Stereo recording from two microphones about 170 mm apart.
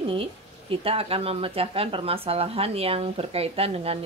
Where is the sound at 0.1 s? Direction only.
35° right (ahead or behind).